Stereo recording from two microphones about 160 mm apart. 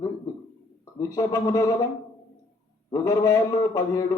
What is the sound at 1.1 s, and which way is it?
Speech, 25° left (ahead or behind).